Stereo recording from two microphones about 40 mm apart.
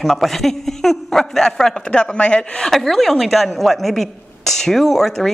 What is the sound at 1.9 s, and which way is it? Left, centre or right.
Speech, left.